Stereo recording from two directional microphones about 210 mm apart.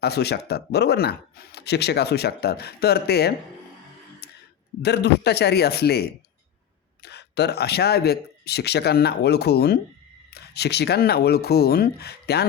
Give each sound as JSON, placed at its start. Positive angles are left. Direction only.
{"t": 0.0, "sound": "speech", "side_deg": 50}
{"t": 4.2, "sound": "a sound", "side_deg": 50}
{"t": 4.8, "sound": "speech", "side_deg": 50}